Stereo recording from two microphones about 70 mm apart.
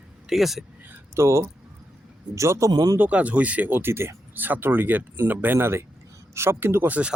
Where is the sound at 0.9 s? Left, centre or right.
Right.